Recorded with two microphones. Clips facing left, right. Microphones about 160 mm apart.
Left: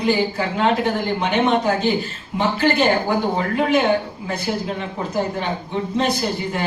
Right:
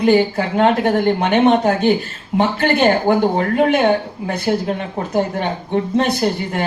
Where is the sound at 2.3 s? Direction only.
60° right (ahead or behind).